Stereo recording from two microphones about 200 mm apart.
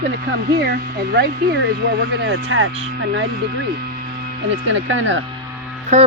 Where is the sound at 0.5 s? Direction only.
55° right (ahead or behind).